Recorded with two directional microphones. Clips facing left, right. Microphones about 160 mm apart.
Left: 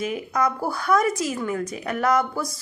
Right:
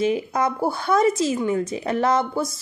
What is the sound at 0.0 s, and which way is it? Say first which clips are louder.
A woman's voice: right 3 dB; 30° right (ahead or behind).